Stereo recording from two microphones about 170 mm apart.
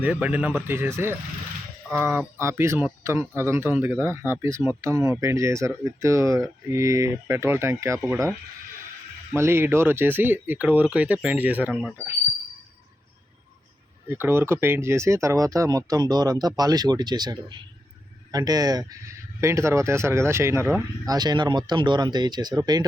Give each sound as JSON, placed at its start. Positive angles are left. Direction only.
{"t": 0.0, "sound": "speech", "side_deg": -10}
{"t": 9.3, "sound": "speech", "side_deg": -15}
{"t": 11.7, "sound": "speech", "side_deg": 5}
{"t": 14.1, "sound": "speech", "side_deg": -15}